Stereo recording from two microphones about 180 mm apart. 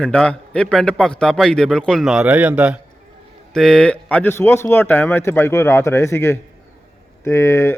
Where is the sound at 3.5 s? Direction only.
5° left (ahead or behind).